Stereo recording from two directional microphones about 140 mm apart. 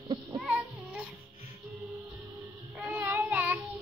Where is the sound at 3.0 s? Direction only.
15° right (ahead or behind).